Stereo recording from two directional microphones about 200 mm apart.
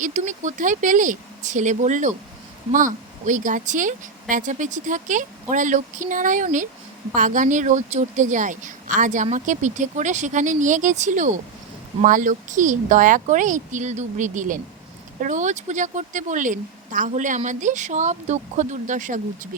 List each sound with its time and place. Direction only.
0.0 s speech: 40° right (ahead or behind)